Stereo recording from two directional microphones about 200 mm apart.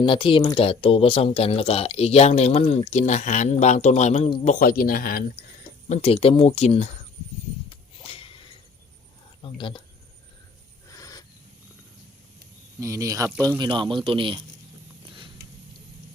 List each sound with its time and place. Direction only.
0.0 s speech: 25° left (ahead or behind); by 5.5 s 45° left (ahead or behind)
5.9 s speech: 30° left (ahead or behind)
7.7 s a sound: 30° left (ahead or behind)
9.4 s speech: 25° left (ahead or behind)
10.9 s owl: 20° left (ahead or behind)
12.8 s a man's voice: 15° right (ahead or behind)
15.0 s a sound: 25° right (ahead or behind)